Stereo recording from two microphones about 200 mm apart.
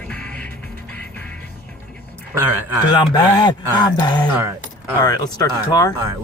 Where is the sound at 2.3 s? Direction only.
15° right (ahead or behind).